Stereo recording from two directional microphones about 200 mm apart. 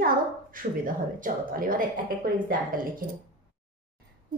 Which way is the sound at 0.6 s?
45° right (ahead or behind).